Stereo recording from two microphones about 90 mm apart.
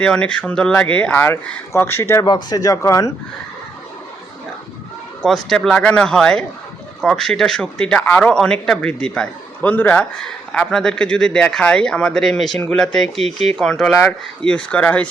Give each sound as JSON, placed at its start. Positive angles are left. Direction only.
{"t": 0.0, "sound": "speech", "side_deg": 10}
{"t": 2.2, "sound": "speech", "side_deg": 50}
{"t": 5.2, "sound": "speech", "side_deg": 5}